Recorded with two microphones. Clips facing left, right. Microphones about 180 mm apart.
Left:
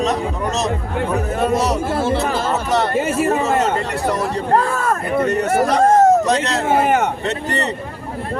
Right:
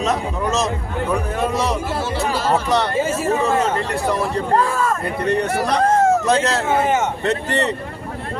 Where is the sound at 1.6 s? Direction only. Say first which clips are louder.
Left 3 dB; 45° left (ahead or behind).